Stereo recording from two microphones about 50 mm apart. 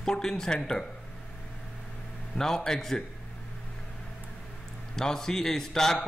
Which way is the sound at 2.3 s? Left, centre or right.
Centre.